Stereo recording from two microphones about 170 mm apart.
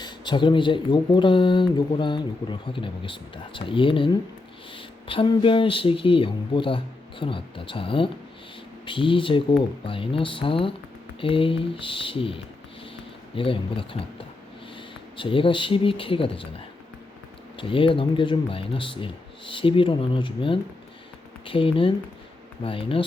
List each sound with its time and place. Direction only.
0.0 s speech: 30° left (ahead or behind)
17.6 s speech: 30° left (ahead or behind)